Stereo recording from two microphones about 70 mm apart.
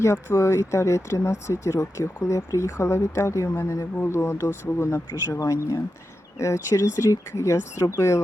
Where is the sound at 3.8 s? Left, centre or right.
Left.